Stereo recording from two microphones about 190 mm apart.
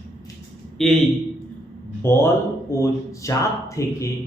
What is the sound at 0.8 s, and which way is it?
Speech, centre (ahead or behind).